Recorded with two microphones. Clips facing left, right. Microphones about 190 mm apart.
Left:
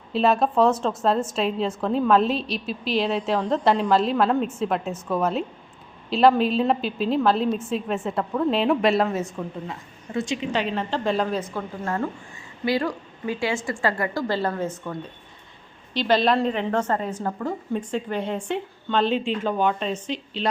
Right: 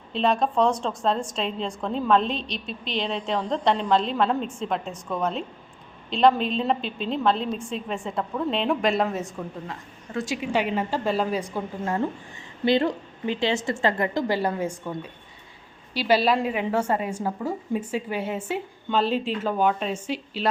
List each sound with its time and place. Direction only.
0.1 s a woman's voice: 5° left (ahead or behind)
10.3 s a woman's voice: 10° right (ahead or behind)